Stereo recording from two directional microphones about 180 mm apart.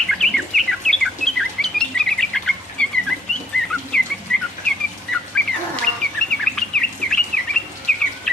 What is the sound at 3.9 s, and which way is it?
Bird, 5° left (ahead or behind).